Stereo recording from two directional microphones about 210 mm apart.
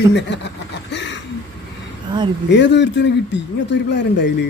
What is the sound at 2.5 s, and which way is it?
Speech, 55° left (ahead or behind).